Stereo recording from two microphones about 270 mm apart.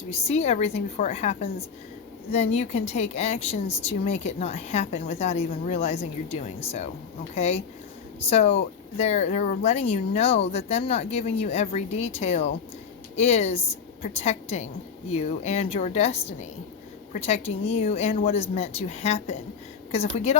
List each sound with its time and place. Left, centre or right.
0.1 s a woman's voice: left